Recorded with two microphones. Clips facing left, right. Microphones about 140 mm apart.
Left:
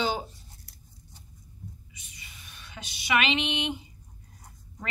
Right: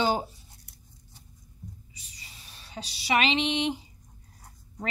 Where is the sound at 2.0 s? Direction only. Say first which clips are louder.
Left 1 dB; 35° right (ahead or behind).